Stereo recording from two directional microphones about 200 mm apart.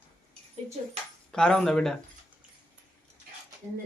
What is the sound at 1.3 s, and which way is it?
Speech, 5° left (ahead or behind).